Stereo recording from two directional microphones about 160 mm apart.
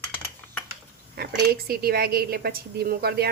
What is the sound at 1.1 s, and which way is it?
Speech, 75° right (ahead or behind).